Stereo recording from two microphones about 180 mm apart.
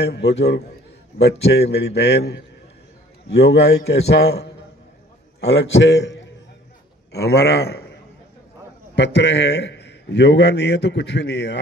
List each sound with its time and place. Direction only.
0.0 s a man's voice: 65° left (ahead or behind); by 6.1 s 85° left
7.1 s a man's voice: 65° left (ahead or behind)
8.9 s a man's voice: 75° left (ahead or behind)